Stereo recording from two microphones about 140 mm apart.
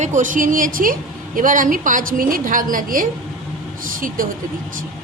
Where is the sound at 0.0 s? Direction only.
65° right (ahead or behind); by 0.9 s 90° right.